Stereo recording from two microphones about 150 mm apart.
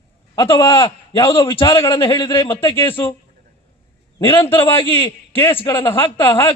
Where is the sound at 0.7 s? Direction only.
35° left (ahead or behind).